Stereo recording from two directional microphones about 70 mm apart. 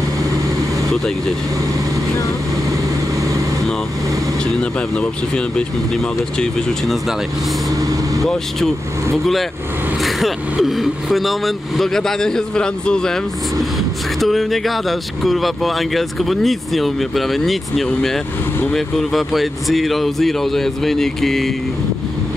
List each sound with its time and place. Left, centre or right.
2.7 s vehicle: right
4.6 s speech: centre
5.3 s speech: centre
7.7 s vehicle: right
9.1 s speech: centre